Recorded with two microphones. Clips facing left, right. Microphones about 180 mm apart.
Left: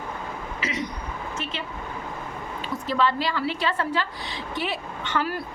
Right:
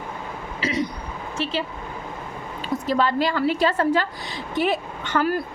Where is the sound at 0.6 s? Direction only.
35° right (ahead or behind).